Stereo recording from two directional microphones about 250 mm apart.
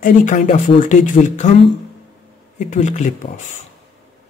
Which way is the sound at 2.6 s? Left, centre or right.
Left.